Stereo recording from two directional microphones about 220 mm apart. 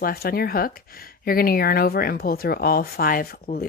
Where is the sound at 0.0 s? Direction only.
45° left (ahead or behind).